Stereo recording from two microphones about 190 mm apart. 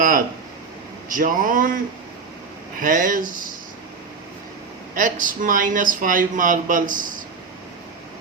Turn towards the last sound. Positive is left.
turn(degrees=-45)  # may be behind; listen again after turning